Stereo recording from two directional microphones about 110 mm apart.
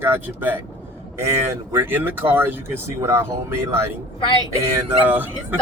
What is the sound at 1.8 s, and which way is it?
Speech, 20° right (ahead or behind).